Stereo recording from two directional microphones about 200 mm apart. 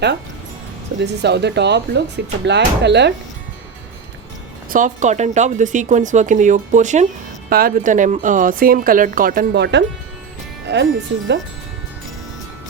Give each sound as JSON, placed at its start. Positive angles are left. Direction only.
{"t": 0.9, "sound": "speech", "side_deg": -60}
{"t": 4.7, "sound": "speech", "side_deg": -40}